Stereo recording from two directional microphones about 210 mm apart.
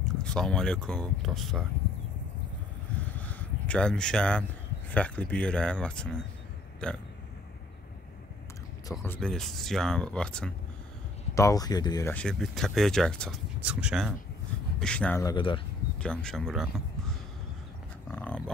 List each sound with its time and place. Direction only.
0.0 s speech: 5° left (ahead or behind)
3.2 s a sound: 5° left (ahead or behind)
4.9 s speech: 5° left (ahead or behind)
9.0 s speech: 5° left (ahead or behind)
11.3 s speech: 15° left (ahead or behind)
15.2 s speech: 25° left (ahead or behind)
16.0 s speech: 5° left (ahead or behind)
18.1 s dog: 5° left (ahead or behind)